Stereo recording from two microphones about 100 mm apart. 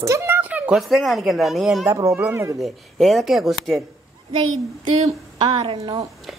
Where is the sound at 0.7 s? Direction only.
Centre (ahead or behind).